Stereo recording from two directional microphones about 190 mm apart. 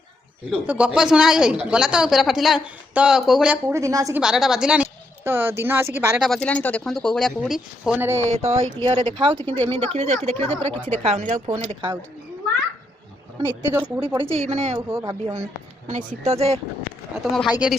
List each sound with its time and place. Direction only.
0.7 s speech: 5° right (ahead or behind)
4.2 s a woman's voice: centre (ahead or behind)
6.2 s speech: 5° left (ahead or behind); by 8.2 s 10° right (ahead or behind)
8.3 s speech: 35° right (ahead or behind)
13.6 s speech: 10° right (ahead or behind)
14.3 s speech: 35° right (ahead or behind)
14.8 s speech: 15° right (ahead or behind)
15.9 s speech: 40° right (ahead or behind)
17.3 s speech: 5° right (ahead or behind)